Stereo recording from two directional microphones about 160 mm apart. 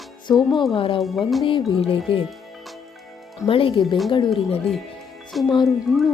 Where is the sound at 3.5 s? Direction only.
35° left (ahead or behind).